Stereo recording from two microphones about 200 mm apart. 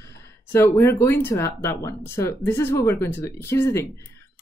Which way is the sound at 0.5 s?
10° left (ahead or behind).